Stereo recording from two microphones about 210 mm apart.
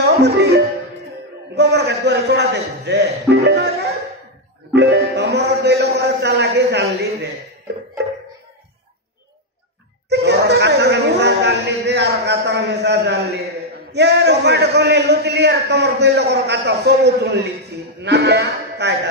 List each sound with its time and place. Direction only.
0.0 s a man's voice: 55° right (ahead or behind)
4.7 s a man's voice: 55° right (ahead or behind)
10.0 s a man's voice: 55° right (ahead or behind)